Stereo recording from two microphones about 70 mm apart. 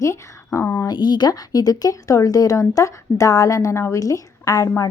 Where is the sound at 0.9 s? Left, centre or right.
Left.